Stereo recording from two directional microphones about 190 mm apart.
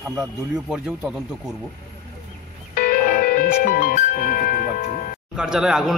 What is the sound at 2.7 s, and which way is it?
Music, 50° left (ahead or behind).